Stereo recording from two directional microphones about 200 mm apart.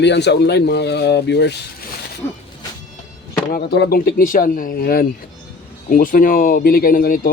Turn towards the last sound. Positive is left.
turn(degrees=45)  # may be behind; listen again after turning